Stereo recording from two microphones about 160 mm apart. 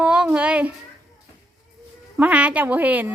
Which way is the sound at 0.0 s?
5° right (ahead or behind).